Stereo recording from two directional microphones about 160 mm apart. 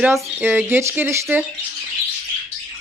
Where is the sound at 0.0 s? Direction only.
10° right (ahead or behind).